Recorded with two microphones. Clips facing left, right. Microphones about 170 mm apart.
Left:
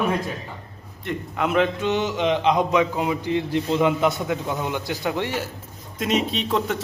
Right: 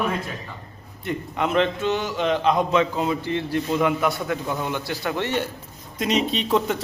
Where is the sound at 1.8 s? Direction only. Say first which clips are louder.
Left 1 dB; 20° left (ahead or behind).